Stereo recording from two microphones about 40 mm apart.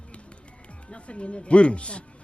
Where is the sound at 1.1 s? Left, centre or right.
Left.